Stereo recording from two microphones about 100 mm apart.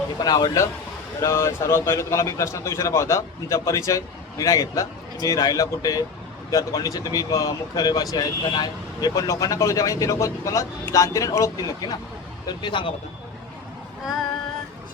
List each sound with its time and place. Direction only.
0.2 s speech: 40° left (ahead or behind)
1.2 s a man's voice: 25° left (ahead or behind)
12.6 s speech: 55° left (ahead or behind)